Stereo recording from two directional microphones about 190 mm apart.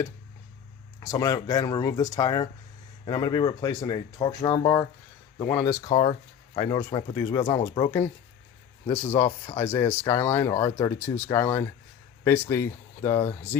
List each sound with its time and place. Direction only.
0.9 s speech: 20° left (ahead or behind)